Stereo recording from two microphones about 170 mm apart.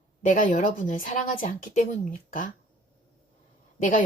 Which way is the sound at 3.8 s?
55° left (ahead or behind).